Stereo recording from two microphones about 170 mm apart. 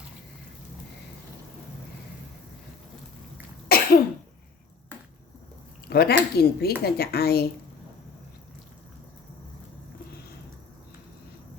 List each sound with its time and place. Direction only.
3.7 s cough: 65° left (ahead or behind)
5.9 s speech: 65° left (ahead or behind)